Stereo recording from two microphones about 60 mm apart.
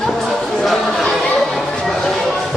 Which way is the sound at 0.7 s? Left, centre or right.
Centre.